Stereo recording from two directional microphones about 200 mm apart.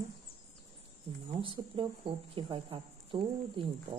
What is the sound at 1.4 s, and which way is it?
Speech, 25° right (ahead or behind).